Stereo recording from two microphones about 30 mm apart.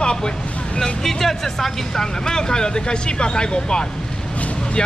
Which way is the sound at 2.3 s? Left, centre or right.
Left.